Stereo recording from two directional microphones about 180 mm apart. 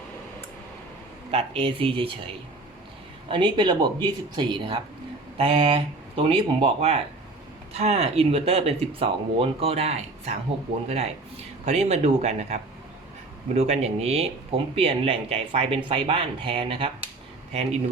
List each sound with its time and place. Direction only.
1.3 s speech: 35° right (ahead or behind)